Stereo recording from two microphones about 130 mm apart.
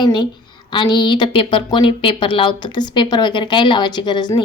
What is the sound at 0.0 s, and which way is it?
A woman's voice, 35° left (ahead or behind).